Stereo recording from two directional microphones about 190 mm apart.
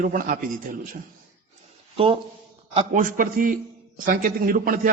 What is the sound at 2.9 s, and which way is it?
A man's voice, 45° right (ahead or behind).